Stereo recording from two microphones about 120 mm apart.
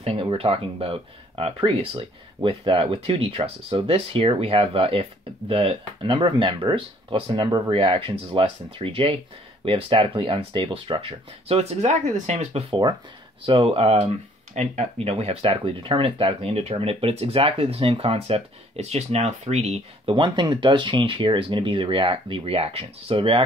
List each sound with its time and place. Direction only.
0.0 s speech: 50° right (ahead or behind); by 12.6 s 65° right (ahead or behind)
13.4 s speech: 50° right (ahead or behind); by 20.2 s 65° right (ahead or behind)
20.2 s speech: 40° right (ahead or behind)